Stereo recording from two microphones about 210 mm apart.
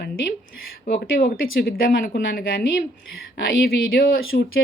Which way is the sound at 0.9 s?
45° left (ahead or behind).